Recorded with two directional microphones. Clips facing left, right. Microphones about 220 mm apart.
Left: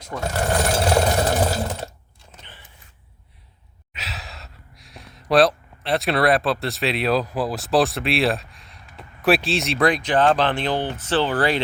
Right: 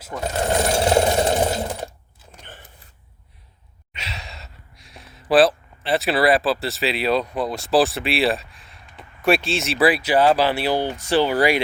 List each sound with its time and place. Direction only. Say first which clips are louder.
0.2 s speech: right 1 dB; 20° right (ahead or behind)
0.9 s sewing machine: right 2 dB; 20° right (ahead or behind)
1.6 s sewing machine: right 1 dB; 10° right (ahead or behind)
2.4 s a sound: right 5 dB; 45° right (ahead or behind)
3.9 s speech: even; centre (ahead or behind)